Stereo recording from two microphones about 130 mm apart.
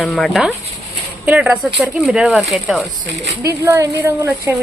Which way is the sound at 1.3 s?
10° right (ahead or behind).